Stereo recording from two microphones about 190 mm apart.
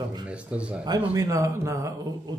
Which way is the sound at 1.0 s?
15° right (ahead or behind).